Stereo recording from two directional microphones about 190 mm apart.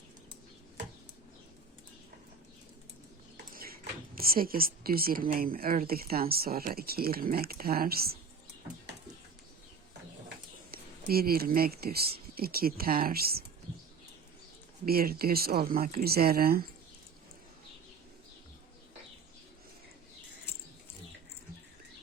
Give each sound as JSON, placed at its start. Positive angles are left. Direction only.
{"t": 3.5, "sound": "speech", "side_deg": -50}
{"t": 10.7, "sound": "speech", "side_deg": -50}
{"t": 14.8, "sound": "speech", "side_deg": -50}